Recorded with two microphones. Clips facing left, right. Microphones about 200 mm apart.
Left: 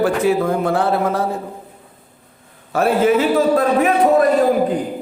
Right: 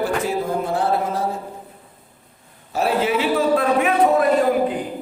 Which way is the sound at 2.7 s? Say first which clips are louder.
Left 5 dB; 55° left (ahead or behind).